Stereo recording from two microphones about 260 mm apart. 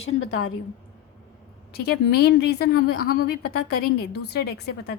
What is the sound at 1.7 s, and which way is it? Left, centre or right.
A woman's voice, left.